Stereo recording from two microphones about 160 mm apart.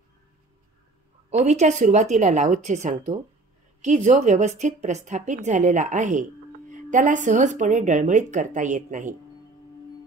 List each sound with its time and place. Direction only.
1.3 s a woman's voice: 45° right (ahead or behind)